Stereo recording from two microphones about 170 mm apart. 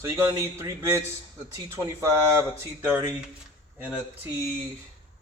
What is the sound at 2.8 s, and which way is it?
Speech, 10° right (ahead or behind).